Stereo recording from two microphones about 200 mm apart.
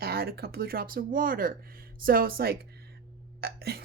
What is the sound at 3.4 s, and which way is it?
Hiccup, 50° right (ahead or behind).